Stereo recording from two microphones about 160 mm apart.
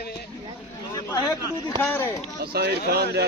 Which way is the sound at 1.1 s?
25° left (ahead or behind).